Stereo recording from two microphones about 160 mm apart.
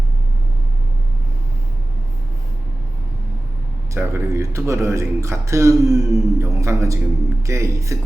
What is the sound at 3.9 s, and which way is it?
Speech, 15° right (ahead or behind).